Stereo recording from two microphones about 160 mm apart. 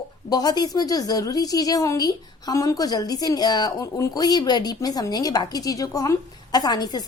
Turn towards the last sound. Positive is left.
turn(degrees=25)  # may be behind; listen again after turning